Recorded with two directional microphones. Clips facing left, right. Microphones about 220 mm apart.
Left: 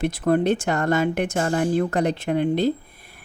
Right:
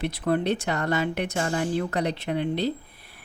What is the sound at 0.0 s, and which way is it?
Speech, 45° left (ahead or behind).